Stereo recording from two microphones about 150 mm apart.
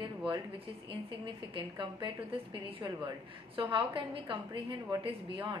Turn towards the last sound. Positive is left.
turn(degrees=-35)  # may be behind; listen again after turning